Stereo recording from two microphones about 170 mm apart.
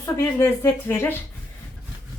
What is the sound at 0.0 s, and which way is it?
A woman's voice, 15° left (ahead or behind).